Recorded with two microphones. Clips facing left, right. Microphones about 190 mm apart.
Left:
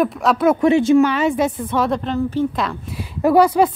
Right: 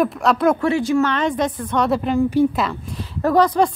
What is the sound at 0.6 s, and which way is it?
Speech, 20° left (ahead or behind).